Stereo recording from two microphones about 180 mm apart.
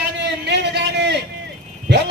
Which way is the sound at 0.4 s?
70° right (ahead or behind).